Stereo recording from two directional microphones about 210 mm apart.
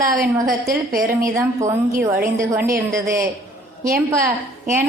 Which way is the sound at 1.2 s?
15° right (ahead or behind).